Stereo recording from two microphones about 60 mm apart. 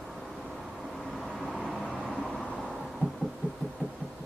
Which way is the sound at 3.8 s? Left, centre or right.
Right.